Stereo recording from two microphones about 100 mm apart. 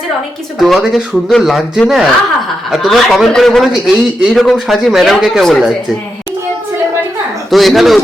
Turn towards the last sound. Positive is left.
turn(degrees=0)  # may be behind; listen again after turning